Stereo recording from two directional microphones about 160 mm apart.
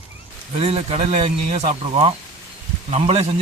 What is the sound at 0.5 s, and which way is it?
A man's voice, 40° right (ahead or behind).